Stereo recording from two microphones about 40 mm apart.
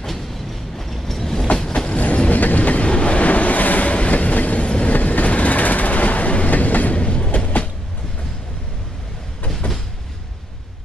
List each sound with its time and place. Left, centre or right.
0.7 s train: centre
1.9 s train: left
7.0 s train: left
7.2 s vehicle: left
9.6 s vehicle: left